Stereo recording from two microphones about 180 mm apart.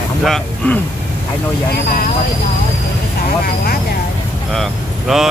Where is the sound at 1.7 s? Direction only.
50° left (ahead or behind).